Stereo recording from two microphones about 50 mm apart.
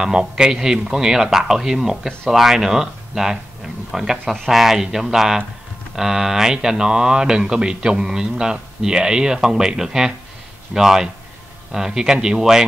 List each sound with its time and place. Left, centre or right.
0.0 s speech: centre